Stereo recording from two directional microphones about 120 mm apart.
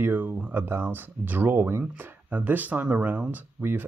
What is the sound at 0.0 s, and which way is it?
Speech, 15° right (ahead or behind).